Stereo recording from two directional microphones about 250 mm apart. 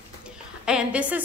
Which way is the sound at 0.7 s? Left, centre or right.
Centre.